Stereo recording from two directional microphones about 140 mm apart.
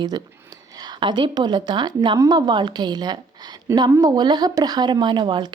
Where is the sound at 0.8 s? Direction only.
30° right (ahead or behind).